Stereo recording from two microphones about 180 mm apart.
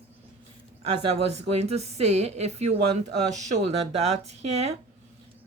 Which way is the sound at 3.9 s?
35° right (ahead or behind).